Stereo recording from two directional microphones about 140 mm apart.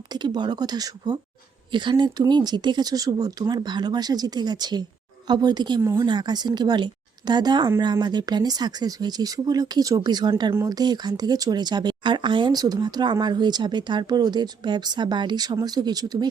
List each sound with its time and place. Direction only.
0.1 s speech: 30° right (ahead or behind)